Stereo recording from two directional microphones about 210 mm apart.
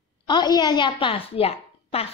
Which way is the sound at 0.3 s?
20° left (ahead or behind).